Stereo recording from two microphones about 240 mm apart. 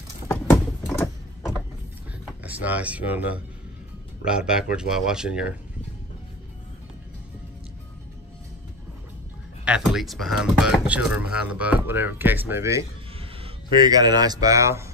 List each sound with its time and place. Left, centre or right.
0.3 s typing: centre
2.4 s speech: centre
9.7 s speech: centre
13.2 s speech: right